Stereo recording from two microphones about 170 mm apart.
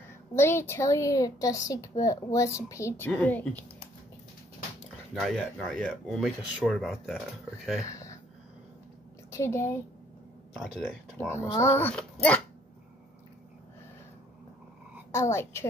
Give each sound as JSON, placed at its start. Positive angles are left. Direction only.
{"t": 0.4, "sound": "a woman's voice", "side_deg": 15}
{"t": 5.2, "sound": "speech", "side_deg": 5}
{"t": 7.8, "sound": "speech", "side_deg": 20}
{"t": 9.3, "sound": "a woman's voice", "side_deg": 15}
{"t": 10.5, "sound": "speech", "side_deg": 0}
{"t": 11.1, "sound": "a woman's voice", "side_deg": 15}
{"t": 15.0, "sound": "a woman's voice", "side_deg": 15}